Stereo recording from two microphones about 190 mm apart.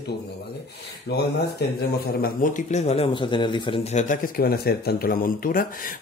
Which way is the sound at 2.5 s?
35° left (ahead or behind).